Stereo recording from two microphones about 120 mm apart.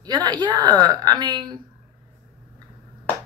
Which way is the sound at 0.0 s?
35° right (ahead or behind).